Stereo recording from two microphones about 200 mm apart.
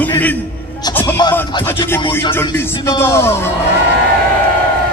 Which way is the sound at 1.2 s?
20° left (ahead or behind).